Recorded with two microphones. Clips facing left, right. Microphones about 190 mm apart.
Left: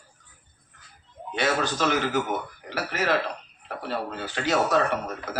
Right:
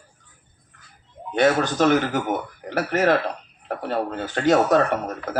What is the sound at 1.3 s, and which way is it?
A man's voice, 50° right (ahead or behind).